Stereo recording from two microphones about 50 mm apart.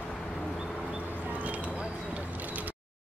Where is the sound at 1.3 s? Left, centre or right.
Right.